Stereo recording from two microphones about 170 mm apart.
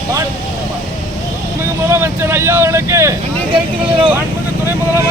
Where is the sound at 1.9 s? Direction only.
15° right (ahead or behind).